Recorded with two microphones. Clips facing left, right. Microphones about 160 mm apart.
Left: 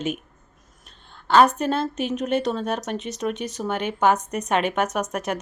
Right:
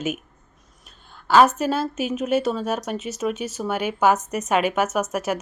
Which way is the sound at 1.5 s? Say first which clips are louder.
Right 1 dB; 5° right (ahead or behind).